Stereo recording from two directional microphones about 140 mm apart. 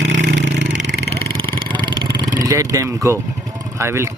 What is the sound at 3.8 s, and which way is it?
Speech, 20° right (ahead or behind).